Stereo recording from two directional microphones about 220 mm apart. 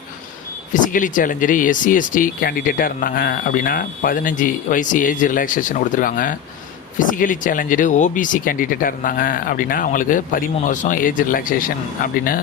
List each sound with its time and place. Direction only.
0.7 s speech: 35° left (ahead or behind)